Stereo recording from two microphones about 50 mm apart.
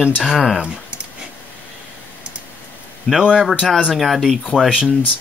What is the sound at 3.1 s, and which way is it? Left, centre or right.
Speech, centre.